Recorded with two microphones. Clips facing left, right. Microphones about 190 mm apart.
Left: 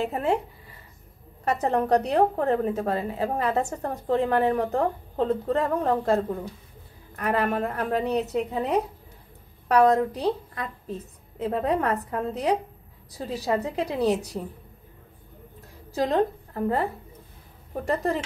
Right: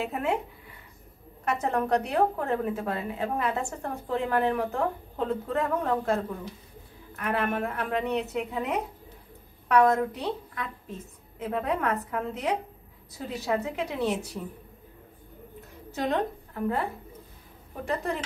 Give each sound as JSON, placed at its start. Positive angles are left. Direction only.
{"t": 0.0, "sound": "a woman's voice", "side_deg": 35}
{"t": 1.4, "sound": "a woman's voice", "side_deg": 35}
{"t": 15.9, "sound": "a woman's voice", "side_deg": 35}